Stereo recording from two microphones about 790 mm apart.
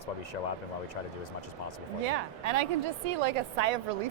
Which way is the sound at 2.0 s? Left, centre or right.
Right.